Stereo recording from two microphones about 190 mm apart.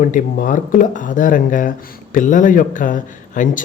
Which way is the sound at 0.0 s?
45° left (ahead or behind).